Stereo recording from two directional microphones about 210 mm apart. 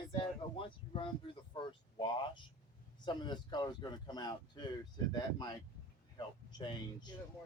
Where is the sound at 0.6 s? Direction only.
25° left (ahead or behind).